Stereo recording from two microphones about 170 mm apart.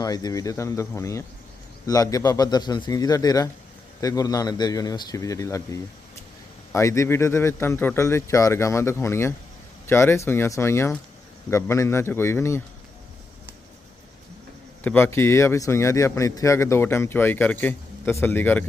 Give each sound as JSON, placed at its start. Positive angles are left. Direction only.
{"t": 0.0, "sound": "a man's voice", "side_deg": 20}
{"t": 14.8, "sound": "a man's voice", "side_deg": 15}